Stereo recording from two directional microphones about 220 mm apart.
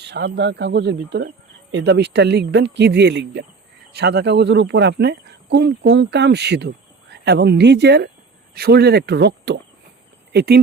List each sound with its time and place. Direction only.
0.0 s speech: 50° right (ahead or behind)